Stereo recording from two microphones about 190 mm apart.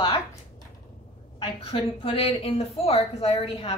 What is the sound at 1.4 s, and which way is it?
A woman's voice, 30° left (ahead or behind).